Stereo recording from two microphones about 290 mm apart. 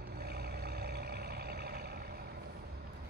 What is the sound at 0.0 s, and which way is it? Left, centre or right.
Vehicle, right.